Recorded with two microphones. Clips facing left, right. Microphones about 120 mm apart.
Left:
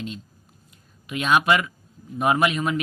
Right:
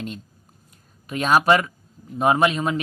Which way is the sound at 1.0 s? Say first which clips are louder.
Right 2 dB; 40° right (ahead or behind).